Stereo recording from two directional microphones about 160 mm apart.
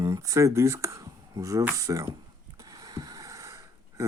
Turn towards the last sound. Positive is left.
turn(degrees=-20)  # may be behind; listen again after turning